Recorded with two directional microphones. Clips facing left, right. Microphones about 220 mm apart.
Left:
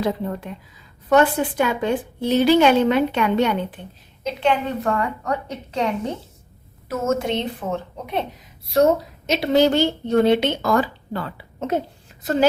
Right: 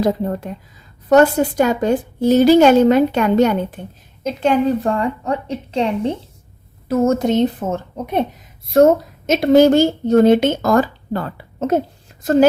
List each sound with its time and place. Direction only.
0.0 s a woman's voice: 40° right (ahead or behind)
4.8 s a woman's voice: 30° right (ahead or behind); by 12.5 s 45° right (ahead or behind)